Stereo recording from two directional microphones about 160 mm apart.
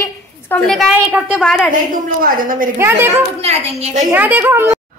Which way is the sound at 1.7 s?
60° right (ahead or behind).